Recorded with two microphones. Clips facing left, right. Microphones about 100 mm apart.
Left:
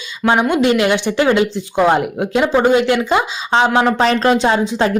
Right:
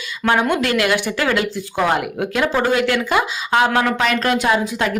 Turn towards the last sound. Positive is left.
turn(degrees=30)  # may be behind; listen again after turning